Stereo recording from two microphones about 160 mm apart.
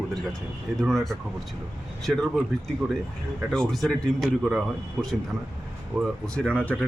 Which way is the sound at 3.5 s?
5° left (ahead or behind).